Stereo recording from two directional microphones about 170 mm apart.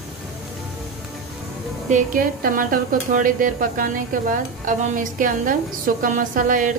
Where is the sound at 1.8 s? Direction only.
50° right (ahead or behind).